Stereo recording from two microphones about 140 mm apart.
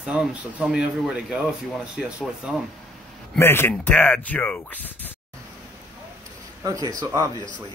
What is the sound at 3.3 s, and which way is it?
Speech, 15° left (ahead or behind).